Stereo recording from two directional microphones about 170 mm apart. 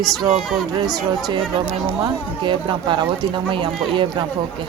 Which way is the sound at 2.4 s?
30° right (ahead or behind).